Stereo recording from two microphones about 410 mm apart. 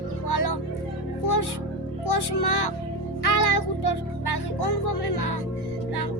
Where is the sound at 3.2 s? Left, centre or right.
Left.